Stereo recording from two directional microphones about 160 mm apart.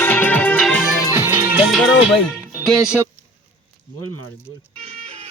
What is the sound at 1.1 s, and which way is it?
Music, 15° right (ahead or behind).